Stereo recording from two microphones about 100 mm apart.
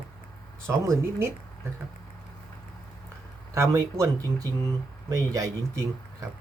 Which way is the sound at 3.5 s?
30° right (ahead or behind).